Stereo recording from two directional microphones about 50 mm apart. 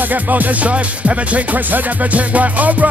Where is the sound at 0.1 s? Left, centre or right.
Right.